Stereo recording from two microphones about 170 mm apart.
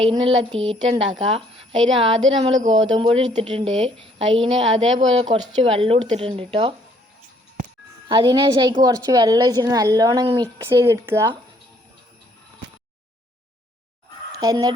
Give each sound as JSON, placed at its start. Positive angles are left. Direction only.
{"t": 0.1, "sound": "a woman's voice", "side_deg": -35}
{"t": 8.0, "sound": "a woman's voice", "side_deg": -25}
{"t": 14.3, "sound": "speech", "side_deg": -20}